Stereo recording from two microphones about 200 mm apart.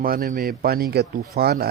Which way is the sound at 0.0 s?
45° right (ahead or behind).